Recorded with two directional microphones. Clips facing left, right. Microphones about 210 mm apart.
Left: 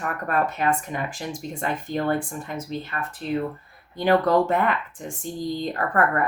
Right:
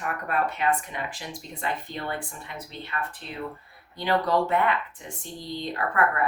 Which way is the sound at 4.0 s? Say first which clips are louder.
Left 5 dB; 45° left (ahead or behind).